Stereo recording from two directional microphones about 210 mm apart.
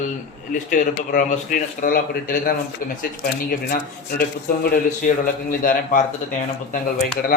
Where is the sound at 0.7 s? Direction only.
40° left (ahead or behind).